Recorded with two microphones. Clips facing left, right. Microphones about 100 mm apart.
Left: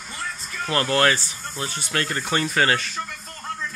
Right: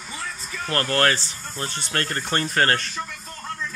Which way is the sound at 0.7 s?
15° left (ahead or behind).